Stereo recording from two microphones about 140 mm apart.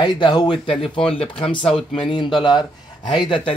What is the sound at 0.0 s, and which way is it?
Speech, 35° left (ahead or behind).